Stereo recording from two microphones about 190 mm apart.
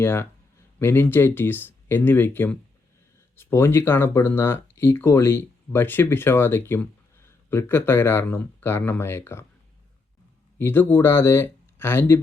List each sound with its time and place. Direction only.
0.0 s speech: 10° left (ahead or behind)
10.6 s speech: 10° left (ahead or behind)